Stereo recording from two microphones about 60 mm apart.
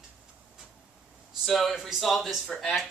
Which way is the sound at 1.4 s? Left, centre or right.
Centre.